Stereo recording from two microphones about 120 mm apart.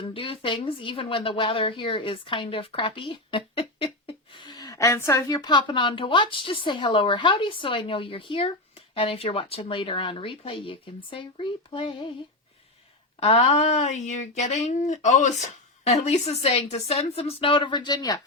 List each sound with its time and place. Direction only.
0.0 s speech: 50° left (ahead or behind); by 5.2 s 25° left (ahead or behind)
5.3 s a woman's voice: 35° left (ahead or behind)
13.1 s speech: 55° left (ahead or behind); by 18.2 s 30° left (ahead or behind)